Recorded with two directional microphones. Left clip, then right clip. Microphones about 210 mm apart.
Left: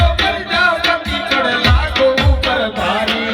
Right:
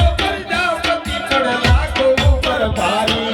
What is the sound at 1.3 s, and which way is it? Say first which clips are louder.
Music: left 1 dB; 50° right (ahead or behind).